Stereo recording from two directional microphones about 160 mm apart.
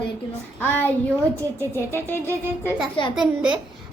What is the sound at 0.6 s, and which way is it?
Music, 10° left (ahead or behind).